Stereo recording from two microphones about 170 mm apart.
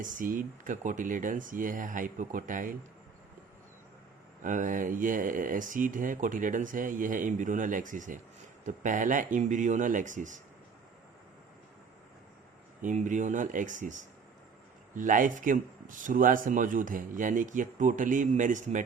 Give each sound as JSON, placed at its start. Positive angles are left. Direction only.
{"t": 0.0, "sound": "speech", "side_deg": -50}
{"t": 4.4, "sound": "speech", "side_deg": -50}
{"t": 12.8, "sound": "speech", "side_deg": -45}